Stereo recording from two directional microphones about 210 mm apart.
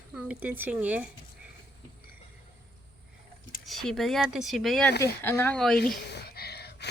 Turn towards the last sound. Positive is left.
turn(degrees=50)  # may be behind; listen again after turning